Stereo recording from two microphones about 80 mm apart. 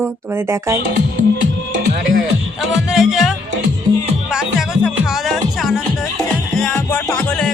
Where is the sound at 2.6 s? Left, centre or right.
Centre.